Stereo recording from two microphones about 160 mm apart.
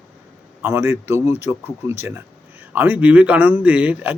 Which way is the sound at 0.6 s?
15° right (ahead or behind).